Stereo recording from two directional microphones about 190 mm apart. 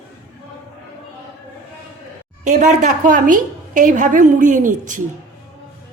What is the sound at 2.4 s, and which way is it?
A woman's voice, 40° right (ahead or behind).